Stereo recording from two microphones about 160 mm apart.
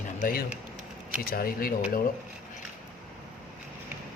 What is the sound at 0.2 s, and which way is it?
Speech, 65° left (ahead or behind).